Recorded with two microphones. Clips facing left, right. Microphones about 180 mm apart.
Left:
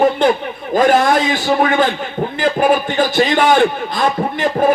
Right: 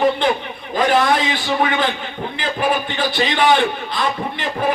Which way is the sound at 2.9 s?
45° left (ahead or behind).